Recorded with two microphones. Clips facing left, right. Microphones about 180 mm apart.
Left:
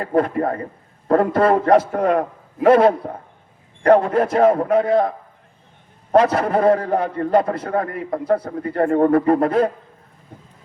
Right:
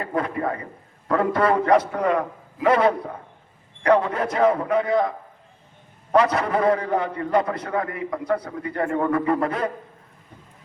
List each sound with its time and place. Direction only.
0.0 s a man's voice: 45° left (ahead or behind)
6.3 s a man's voice: 50° left (ahead or behind)